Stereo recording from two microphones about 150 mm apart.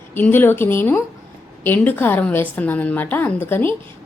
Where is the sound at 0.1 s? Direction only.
15° left (ahead or behind).